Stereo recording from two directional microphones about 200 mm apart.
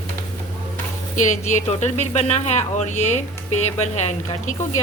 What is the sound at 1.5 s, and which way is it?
Speech, 35° left (ahead or behind).